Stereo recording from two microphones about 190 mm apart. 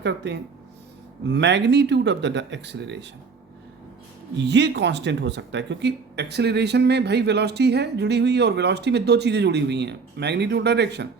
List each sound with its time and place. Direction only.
0.0 s speech: 65° right (ahead or behind)
4.4 s speech: 65° right (ahead or behind)